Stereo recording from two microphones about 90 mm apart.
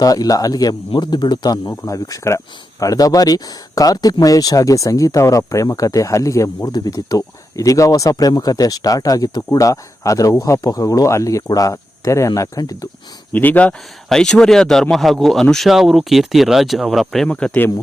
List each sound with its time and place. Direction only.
0.0 s speech: 40° left (ahead or behind)
1.7 s speech: 35° left (ahead or behind)
6.7 s speech: 45° left (ahead or behind)
13.3 s speech: 20° left (ahead or behind)
14.1 s speech: 5° left (ahead or behind)
17.2 s speech: 15° left (ahead or behind)